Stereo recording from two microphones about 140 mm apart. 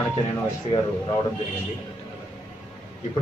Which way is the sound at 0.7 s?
50° left (ahead or behind).